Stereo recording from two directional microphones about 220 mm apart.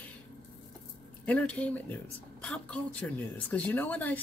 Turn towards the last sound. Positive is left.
turn(degrees=5)  # may be behind; listen again after turning